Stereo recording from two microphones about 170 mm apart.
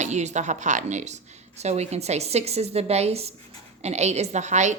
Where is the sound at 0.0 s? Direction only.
40° right (ahead or behind).